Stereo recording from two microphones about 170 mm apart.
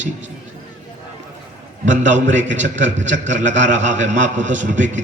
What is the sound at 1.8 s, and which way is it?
Speech, 45° right (ahead or behind).